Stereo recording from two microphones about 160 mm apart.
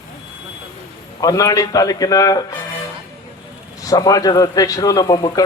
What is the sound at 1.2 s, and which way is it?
A man's voice, 20° left (ahead or behind).